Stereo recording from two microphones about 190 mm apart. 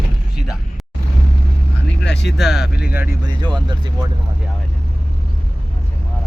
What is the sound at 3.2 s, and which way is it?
Speech, 25° right (ahead or behind).